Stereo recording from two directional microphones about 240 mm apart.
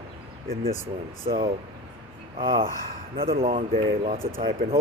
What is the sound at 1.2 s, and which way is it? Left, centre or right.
Speech, right.